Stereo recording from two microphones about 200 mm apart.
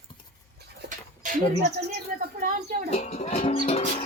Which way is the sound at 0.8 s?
40° right (ahead or behind).